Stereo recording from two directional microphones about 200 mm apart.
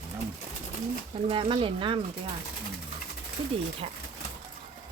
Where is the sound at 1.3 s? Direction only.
25° right (ahead or behind).